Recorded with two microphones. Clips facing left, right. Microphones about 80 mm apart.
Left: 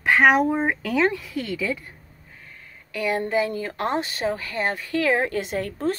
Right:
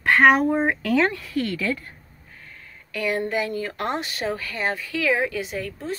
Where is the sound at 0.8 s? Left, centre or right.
Centre.